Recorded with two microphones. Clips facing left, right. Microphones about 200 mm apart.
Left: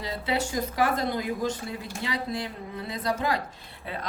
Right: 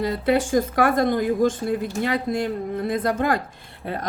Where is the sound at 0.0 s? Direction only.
50° right (ahead or behind).